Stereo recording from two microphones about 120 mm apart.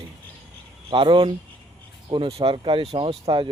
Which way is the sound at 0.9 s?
45° right (ahead or behind).